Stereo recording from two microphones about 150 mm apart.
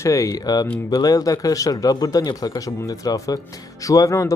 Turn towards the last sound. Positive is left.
turn(degrees=20)  # may be behind; listen again after turning